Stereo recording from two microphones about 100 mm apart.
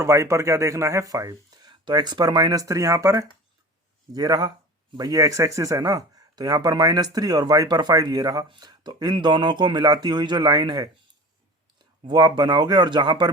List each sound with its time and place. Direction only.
0.0 s speech: 30° right (ahead or behind)
4.1 s speech: 40° right (ahead or behind)
12.0 s speech: 45° right (ahead or behind)